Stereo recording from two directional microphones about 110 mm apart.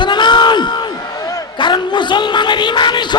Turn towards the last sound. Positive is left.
turn(degrees=45)  # may be behind; listen again after turning